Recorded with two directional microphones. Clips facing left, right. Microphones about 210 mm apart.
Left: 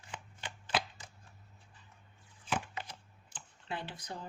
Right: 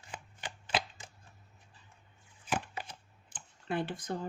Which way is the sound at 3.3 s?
50° right (ahead or behind).